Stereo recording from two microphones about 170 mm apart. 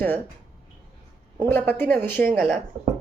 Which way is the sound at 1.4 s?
10° left (ahead or behind).